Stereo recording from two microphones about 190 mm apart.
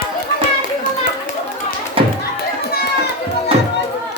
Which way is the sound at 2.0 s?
30° right (ahead or behind).